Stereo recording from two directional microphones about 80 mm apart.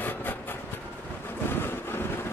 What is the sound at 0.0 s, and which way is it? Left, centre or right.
Train, left.